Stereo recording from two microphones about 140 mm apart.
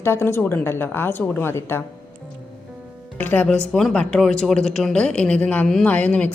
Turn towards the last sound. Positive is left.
turn(degrees=10)  # may be behind; listen again after turning